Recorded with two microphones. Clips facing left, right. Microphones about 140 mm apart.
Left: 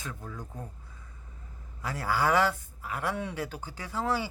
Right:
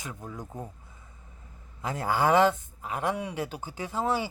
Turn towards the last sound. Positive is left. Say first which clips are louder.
# right 2 dB
turn(degrees=-15)  # may be behind; listen again after turning